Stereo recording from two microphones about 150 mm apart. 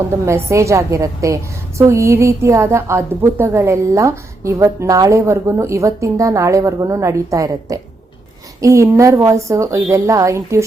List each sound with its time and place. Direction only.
0.1 s speech: 20° right (ahead or behind)